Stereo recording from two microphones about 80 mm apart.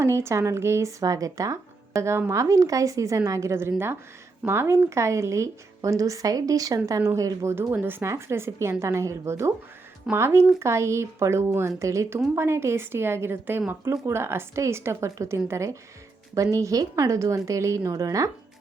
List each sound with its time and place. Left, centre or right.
0.0 s a woman's voice: right
7.7 s a woman's voice: right